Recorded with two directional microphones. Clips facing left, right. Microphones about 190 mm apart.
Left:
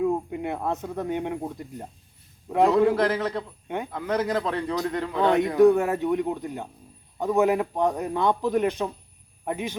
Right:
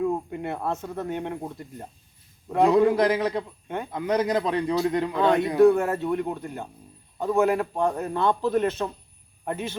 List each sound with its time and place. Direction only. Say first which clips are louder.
0.0 s a man's voice: left 1 dB; 10° left (ahead or behind)
2.9 s speech: right 2 dB; 15° right (ahead or behind)
5.2 s a man's voice: even; 15° left (ahead or behind)